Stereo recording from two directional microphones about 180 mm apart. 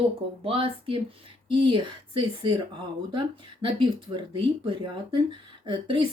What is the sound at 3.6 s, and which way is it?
A woman's voice, 25° right (ahead or behind).